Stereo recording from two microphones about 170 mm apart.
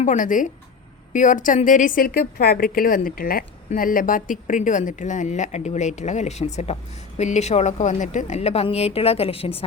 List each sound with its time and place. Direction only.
0.0 s a woman's voice: 50° left (ahead or behind); by 9.6 s 35° left (ahead or behind)